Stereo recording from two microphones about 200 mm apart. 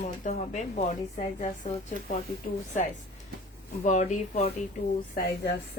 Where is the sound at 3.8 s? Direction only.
35° left (ahead or behind).